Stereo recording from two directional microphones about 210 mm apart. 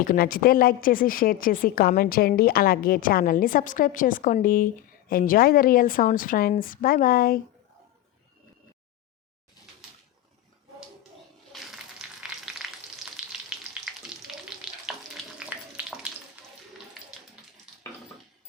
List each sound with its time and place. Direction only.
0.0 s a woman's voice: 45° left (ahead or behind)
12.0 s frying: centre (ahead or behind)
15.5 s bathtub: 5° right (ahead or behind)
16.4 s tap: 10° right (ahead or behind)